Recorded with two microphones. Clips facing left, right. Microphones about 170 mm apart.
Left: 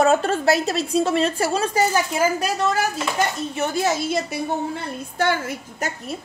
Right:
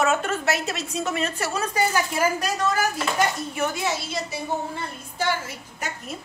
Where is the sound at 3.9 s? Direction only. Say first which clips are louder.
Left 6 dB; 50° left (ahead or behind).